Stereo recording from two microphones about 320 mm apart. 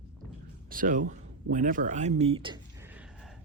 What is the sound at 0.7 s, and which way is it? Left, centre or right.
Speech, right.